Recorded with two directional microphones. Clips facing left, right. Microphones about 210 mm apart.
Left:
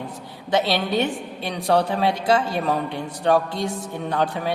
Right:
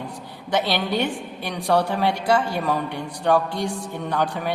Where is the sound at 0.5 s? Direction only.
25° left (ahead or behind).